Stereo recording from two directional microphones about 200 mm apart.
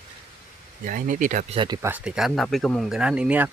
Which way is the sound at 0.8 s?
40° right (ahead or behind).